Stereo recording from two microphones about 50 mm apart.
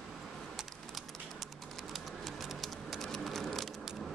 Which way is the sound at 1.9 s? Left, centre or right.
Centre.